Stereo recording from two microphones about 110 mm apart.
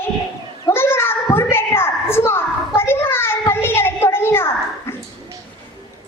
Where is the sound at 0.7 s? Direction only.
20° left (ahead or behind).